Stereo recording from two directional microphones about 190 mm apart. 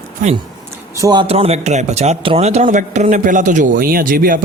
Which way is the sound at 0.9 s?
20° right (ahead or behind).